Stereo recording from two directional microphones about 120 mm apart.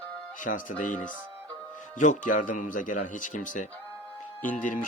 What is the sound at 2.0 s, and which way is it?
Speech, 90° left.